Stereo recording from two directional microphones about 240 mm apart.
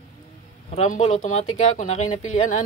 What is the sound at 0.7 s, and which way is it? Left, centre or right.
Speech, left.